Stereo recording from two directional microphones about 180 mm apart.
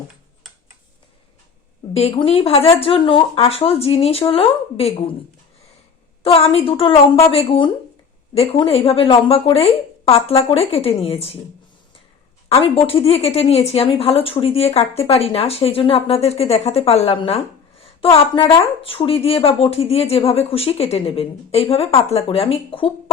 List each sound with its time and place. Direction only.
1.9 s speech: 35° left (ahead or behind)
6.2 s speech: 30° left (ahead or behind)
12.5 s speech: 30° left (ahead or behind)